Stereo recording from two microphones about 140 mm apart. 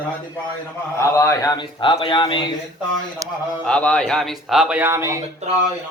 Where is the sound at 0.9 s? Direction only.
20° left (ahead or behind); by 2.4 s 35° left (ahead or behind).